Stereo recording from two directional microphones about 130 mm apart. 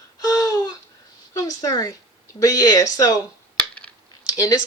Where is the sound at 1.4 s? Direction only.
30° left (ahead or behind).